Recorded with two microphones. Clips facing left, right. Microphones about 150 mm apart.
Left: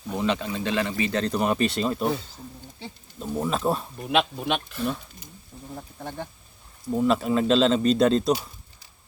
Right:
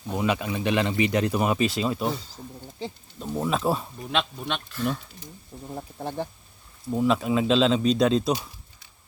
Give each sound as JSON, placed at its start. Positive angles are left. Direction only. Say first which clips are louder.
{"t": 0.2, "sound": "speech", "louder": "even", "side_deg": -15}
{"t": 3.2, "sound": "speech", "louder": "even", "side_deg": 0}
{"t": 6.0, "sound": "speech", "louder": "right 4 dB", "side_deg": -30}
{"t": 6.9, "sound": "speech", "louder": "left 1 dB", "side_deg": 0}